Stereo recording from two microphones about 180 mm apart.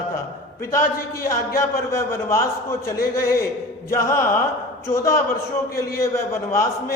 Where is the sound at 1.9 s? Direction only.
15° left (ahead or behind).